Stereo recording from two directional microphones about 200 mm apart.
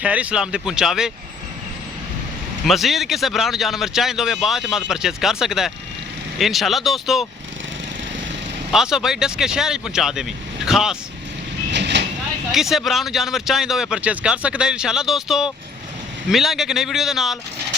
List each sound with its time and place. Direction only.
0.0 s speech: 5° right (ahead or behind)
2.6 s speech: centre (ahead or behind)
8.7 s speech: centre (ahead or behind)
11.7 s vehicle: 60° right (ahead or behind)
12.5 s speech: centre (ahead or behind)